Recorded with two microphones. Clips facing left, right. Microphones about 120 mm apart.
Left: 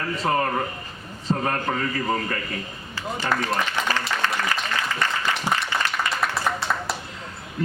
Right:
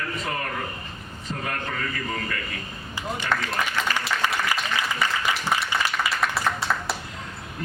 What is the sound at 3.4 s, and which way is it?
Speech, 35° left (ahead or behind).